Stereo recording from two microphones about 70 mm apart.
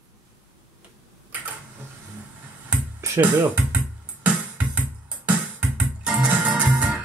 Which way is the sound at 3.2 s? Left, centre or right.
Right.